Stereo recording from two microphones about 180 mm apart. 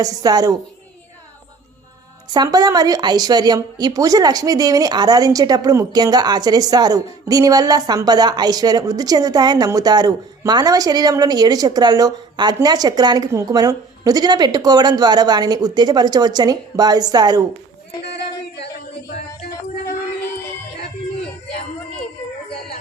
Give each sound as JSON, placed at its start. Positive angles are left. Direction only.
{"t": 0.0, "sound": "a woman's voice", "side_deg": -20}
{"t": 2.3, "sound": "a woman's voice", "side_deg": -20}
{"t": 18.0, "sound": "female singing", "side_deg": 65}